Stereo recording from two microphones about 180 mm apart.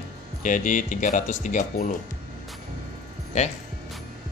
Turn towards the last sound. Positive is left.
turn(degrees=40)  # may be behind; listen again after turning